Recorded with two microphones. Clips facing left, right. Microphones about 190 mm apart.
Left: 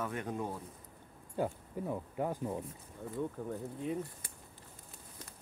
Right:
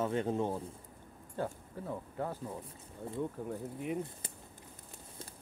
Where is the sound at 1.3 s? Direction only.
15° left (ahead or behind).